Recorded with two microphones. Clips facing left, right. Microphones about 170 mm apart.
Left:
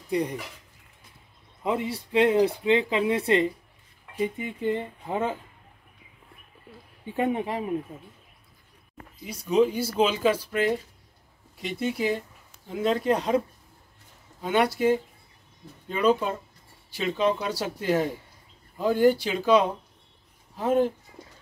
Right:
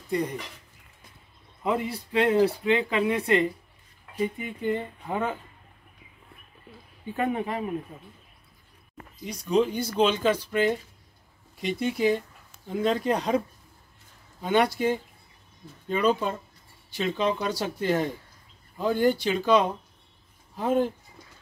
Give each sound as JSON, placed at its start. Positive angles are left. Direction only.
{"t": 0.1, "sound": "speech", "side_deg": 10}
{"t": 1.6, "sound": "speech", "side_deg": 20}
{"t": 7.2, "sound": "speech", "side_deg": 20}
{"t": 9.2, "sound": "speech", "side_deg": 5}
{"t": 14.4, "sound": "speech", "side_deg": 5}